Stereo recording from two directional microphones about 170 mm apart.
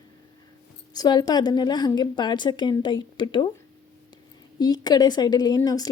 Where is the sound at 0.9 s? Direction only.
25° left (ahead or behind).